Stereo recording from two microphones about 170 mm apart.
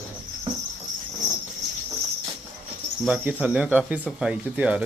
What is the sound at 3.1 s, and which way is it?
Speech, 10° right (ahead or behind).